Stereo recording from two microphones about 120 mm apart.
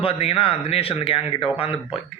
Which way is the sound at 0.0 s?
55° left (ahead or behind).